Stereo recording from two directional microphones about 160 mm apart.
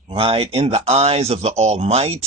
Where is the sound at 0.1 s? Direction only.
35° right (ahead or behind).